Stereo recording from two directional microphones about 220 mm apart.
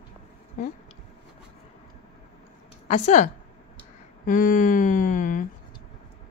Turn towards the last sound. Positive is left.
turn(degrees=35)  # may be behind; listen again after turning